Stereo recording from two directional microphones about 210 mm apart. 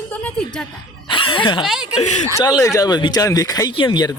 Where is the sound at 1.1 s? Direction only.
25° left (ahead or behind).